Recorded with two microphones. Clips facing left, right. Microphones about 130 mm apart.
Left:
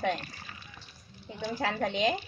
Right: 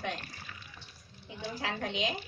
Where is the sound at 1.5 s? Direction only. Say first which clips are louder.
Left 5 dB; 45° left (ahead or behind).